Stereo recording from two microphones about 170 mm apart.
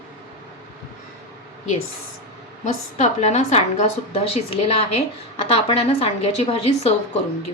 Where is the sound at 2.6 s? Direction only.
45° left (ahead or behind).